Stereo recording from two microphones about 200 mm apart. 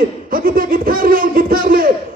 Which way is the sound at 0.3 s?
45° right (ahead or behind).